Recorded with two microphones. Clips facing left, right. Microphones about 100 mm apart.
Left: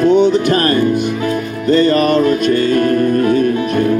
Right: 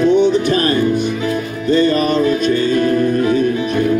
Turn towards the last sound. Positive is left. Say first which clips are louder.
# left 2 dB
turn(degrees=50)  # may be behind; listen again after turning